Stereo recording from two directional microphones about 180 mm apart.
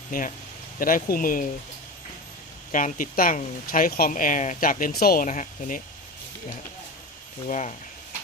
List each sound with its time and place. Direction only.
0.1 s speech: 50° left (ahead or behind)
2.7 s speech: 50° left (ahead or behind)
7.4 s speech: 40° left (ahead or behind)